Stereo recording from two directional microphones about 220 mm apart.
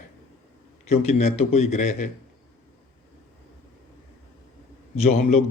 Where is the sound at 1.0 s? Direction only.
30° left (ahead or behind).